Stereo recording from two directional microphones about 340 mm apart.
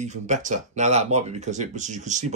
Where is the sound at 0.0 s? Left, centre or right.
Right.